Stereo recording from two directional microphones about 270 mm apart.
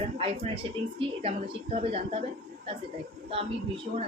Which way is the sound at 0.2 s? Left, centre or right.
Centre.